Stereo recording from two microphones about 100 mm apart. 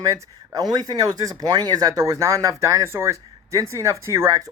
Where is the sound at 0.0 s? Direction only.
40° right (ahead or behind).